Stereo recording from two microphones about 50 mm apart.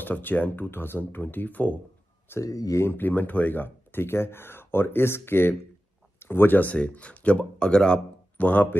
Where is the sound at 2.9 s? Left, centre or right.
Left.